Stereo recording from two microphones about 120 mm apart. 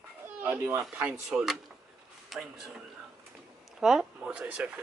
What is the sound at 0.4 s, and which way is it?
Children playing, 20° right (ahead or behind).